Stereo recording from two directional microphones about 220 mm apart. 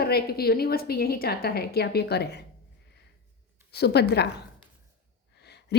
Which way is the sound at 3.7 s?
50° left (ahead or behind).